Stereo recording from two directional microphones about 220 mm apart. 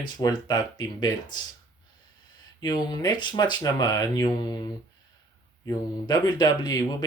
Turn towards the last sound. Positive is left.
turn(degrees=15)  # may be behind; listen again after turning